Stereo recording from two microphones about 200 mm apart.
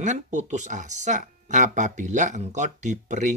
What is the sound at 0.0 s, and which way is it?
Speech, 35° right (ahead or behind).